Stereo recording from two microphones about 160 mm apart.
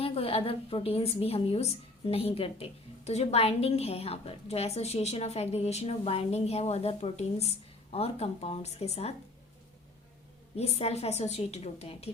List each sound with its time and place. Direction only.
0.0 s a woman's voice: 35° left (ahead or behind)
10.6 s a woman's voice: 40° left (ahead or behind)